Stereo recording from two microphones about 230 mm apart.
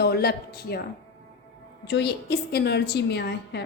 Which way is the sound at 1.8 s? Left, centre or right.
Left.